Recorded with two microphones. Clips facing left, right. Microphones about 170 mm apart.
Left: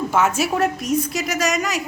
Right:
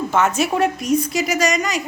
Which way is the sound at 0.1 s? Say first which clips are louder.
Right 2 dB; 5° left (ahead or behind).